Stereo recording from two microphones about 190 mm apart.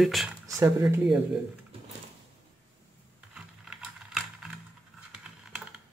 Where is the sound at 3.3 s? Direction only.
5° right (ahead or behind).